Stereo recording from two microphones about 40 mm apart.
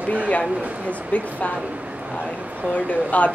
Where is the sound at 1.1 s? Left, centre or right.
Left.